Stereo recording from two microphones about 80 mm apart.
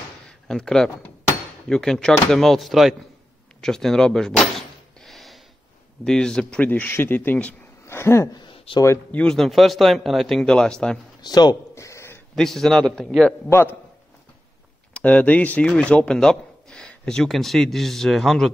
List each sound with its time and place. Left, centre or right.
0.3 s a sound: centre
1.7 s a man's voice: centre
3.6 s door: centre
6.0 s a man's voice: centre
6.7 s speech: left
7.8 s a sound: left
8.3 s a sound: left
9.1 s a man's voice: centre
9.4 s a man's voice: centre
11.1 s speech: left
11.7 s a sound: left
12.4 s a man's voice: centre
13.5 s speech: left
15.0 s speech: centre